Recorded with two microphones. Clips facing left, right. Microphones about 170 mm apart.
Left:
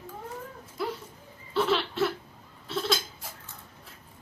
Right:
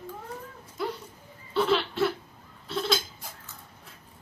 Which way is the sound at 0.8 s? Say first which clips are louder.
Even; 5° left (ahead or behind).